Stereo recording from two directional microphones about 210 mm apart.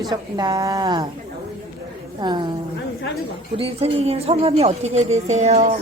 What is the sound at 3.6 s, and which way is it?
A woman's voice, 30° right (ahead or behind).